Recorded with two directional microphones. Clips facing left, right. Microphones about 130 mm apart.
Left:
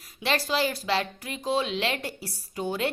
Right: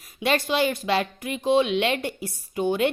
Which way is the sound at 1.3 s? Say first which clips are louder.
Right 7 dB; 15° right (ahead or behind).